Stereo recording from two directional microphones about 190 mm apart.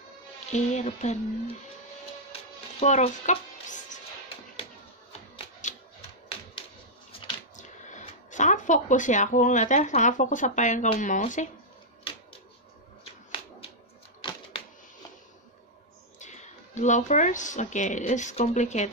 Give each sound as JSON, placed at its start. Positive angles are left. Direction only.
{"t": 0.5, "sound": "speech", "side_deg": 35}
{"t": 2.8, "sound": "speech", "side_deg": 40}
{"t": 5.6, "sound": "typewriter", "side_deg": 40}
{"t": 7.1, "sound": "speech", "side_deg": 40}
{"t": 16.2, "sound": "speech", "side_deg": 40}